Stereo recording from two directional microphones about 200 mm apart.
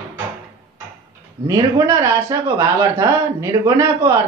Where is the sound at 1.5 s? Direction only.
15° right (ahead or behind).